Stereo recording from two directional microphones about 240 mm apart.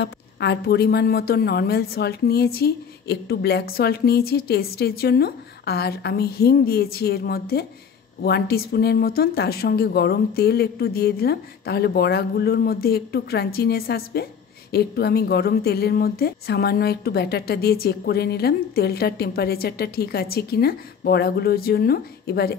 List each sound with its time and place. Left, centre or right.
0.0 s a woman's voice: left